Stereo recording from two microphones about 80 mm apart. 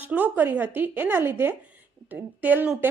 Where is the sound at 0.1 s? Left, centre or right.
Right.